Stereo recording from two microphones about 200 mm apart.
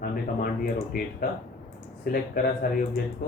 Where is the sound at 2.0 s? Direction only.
45° left (ahead or behind).